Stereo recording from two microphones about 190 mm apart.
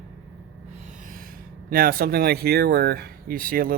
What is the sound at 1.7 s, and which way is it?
Speech, 50° right (ahead or behind).